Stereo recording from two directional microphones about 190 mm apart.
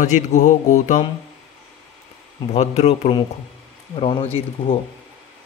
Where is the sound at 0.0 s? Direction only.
40° left (ahead or behind).